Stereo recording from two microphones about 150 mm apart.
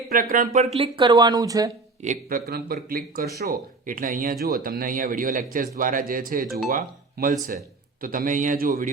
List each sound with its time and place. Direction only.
0.1 s speech: 70° right (ahead or behind)
0.6 s speech: 40° right (ahead or behind); by 1.7 s 25° right (ahead or behind)
2.0 s a man's voice: 55° right (ahead or behind)
2.9 s a man's voice: 85° right; by 8.9 s 70° right (ahead or behind)